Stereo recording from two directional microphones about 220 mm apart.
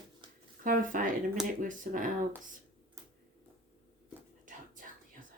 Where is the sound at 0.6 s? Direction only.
40° right (ahead or behind).